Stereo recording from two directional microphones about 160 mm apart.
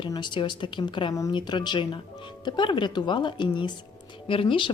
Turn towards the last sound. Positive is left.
turn(degrees=30)  # may be behind; listen again after turning